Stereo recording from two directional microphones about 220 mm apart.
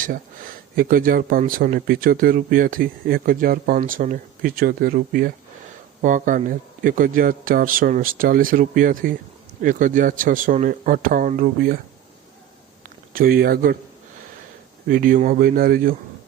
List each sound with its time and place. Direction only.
0.0 s speech: 40° right (ahead or behind)
13.1 s speech: 40° right (ahead or behind)
14.8 s speech: 40° right (ahead or behind)